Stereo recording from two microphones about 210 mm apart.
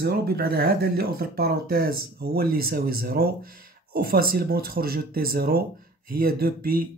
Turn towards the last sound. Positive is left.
turn(degrees=-45)  # may be behind; listen again after turning